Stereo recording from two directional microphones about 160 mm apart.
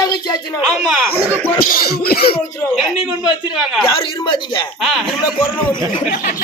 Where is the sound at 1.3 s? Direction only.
10° left (ahead or behind).